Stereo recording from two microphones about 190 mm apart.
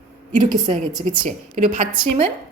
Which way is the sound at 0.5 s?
20° right (ahead or behind).